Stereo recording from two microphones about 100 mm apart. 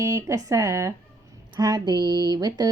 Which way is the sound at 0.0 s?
30° right (ahead or behind).